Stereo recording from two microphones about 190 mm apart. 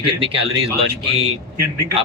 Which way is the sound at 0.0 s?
30° right (ahead or behind).